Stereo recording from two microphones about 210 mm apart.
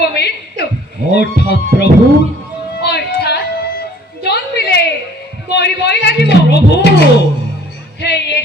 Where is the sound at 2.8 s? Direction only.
50° left (ahead or behind).